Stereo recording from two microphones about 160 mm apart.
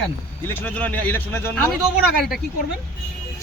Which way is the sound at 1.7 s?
Centre (ahead or behind).